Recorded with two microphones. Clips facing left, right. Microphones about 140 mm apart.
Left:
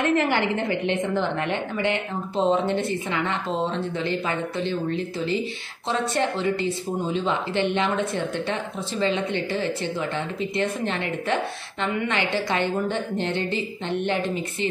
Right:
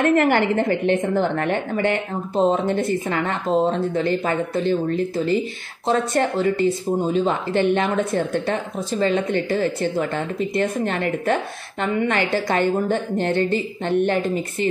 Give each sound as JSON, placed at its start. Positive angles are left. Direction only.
{"t": 0.0, "sound": "speech", "side_deg": -50}